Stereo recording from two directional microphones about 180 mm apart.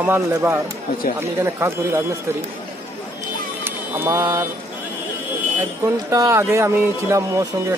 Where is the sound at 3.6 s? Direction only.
15° right (ahead or behind).